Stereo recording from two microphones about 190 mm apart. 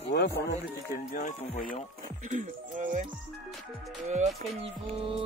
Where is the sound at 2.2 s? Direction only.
40° right (ahead or behind).